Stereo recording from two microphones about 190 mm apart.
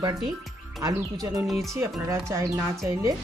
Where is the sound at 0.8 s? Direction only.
20° right (ahead or behind).